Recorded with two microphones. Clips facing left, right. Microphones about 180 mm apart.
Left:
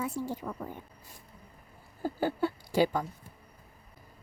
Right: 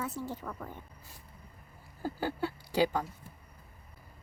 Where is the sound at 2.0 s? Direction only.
45° left (ahead or behind).